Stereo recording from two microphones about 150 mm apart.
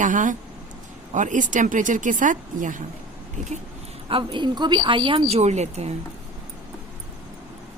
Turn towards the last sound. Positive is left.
turn(degrees=-45)  # may be behind; listen again after turning